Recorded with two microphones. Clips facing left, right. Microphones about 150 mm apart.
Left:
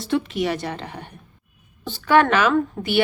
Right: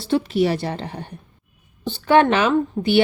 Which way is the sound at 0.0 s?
35° right (ahead or behind).